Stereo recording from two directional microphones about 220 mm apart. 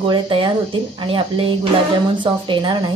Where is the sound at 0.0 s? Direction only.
20° right (ahead or behind).